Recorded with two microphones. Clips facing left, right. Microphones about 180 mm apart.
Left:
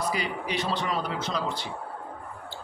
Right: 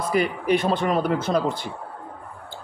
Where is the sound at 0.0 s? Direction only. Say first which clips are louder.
Right 7 dB; 55° right (ahead or behind).